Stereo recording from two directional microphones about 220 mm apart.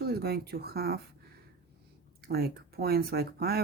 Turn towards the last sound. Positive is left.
turn(degrees=-45)  # may be behind; listen again after turning